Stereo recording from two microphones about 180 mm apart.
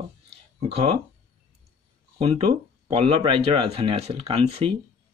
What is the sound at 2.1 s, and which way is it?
Speech, 35° right (ahead or behind).